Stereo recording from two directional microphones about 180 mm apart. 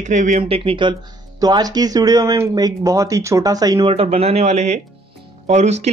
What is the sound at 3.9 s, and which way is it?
Speech, 35° right (ahead or behind).